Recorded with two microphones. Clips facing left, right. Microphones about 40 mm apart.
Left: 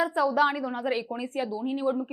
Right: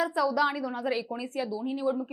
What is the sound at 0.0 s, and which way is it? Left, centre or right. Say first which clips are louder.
A woman's voice: left 2 dB; left.